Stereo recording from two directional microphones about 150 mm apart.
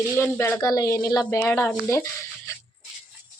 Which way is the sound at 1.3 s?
15° left (ahead or behind).